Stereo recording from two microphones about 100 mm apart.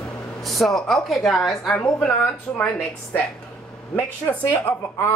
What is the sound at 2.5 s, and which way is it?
Speech, 20° left (ahead or behind).